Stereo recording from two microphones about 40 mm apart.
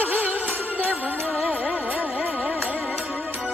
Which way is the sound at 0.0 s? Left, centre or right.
Right.